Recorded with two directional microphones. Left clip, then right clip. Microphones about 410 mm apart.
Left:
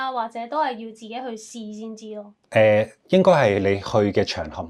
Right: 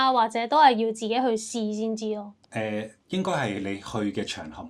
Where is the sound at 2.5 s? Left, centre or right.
Left.